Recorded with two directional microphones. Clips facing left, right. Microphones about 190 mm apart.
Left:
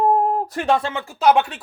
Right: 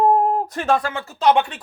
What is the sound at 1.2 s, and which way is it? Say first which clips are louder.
Speech: left 1 dB; 5° left (ahead or behind).